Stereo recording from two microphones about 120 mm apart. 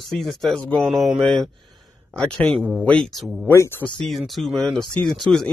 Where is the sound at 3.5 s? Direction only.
25° left (ahead or behind).